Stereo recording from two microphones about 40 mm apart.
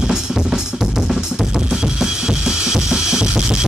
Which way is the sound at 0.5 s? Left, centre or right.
Centre.